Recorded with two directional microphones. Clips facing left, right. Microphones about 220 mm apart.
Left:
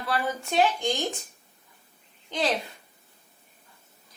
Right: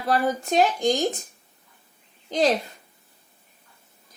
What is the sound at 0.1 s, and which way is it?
Speech, 40° right (ahead or behind).